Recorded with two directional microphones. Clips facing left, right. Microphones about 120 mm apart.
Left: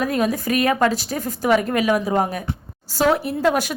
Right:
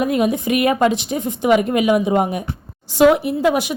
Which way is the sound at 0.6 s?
20° right (ahead or behind).